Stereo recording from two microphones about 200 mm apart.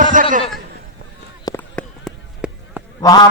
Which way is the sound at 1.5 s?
5° left (ahead or behind).